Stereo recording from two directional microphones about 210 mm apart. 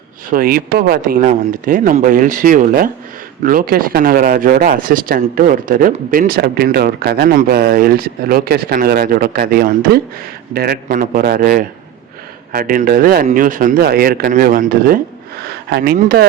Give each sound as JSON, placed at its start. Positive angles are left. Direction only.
{"t": 0.3, "sound": "speech", "side_deg": -45}